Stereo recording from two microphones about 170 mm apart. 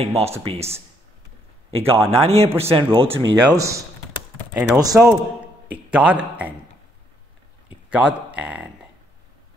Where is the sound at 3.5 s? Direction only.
20° right (ahead or behind).